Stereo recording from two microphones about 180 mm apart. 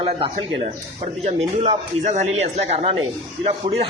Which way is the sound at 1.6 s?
40° right (ahead or behind).